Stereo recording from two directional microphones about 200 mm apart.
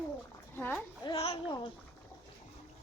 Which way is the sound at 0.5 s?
10° left (ahead or behind).